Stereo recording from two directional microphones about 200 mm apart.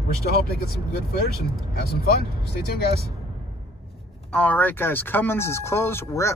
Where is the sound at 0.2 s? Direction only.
50° left (ahead or behind).